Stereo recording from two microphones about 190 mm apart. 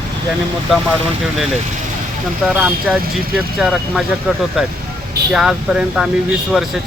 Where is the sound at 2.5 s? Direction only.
Centre (ahead or behind).